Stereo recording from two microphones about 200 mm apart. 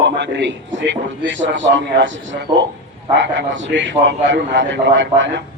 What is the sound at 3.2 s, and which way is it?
A man's voice, 65° right (ahead or behind).